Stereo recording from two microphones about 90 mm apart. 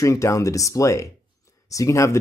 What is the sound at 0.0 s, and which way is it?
Speech, 35° left (ahead or behind).